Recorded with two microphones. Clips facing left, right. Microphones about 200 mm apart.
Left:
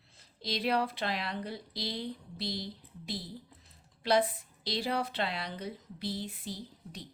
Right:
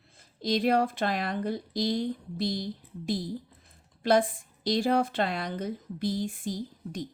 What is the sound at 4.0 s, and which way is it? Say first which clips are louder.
A woman's voice: right 4 dB; 50° right (ahead or behind).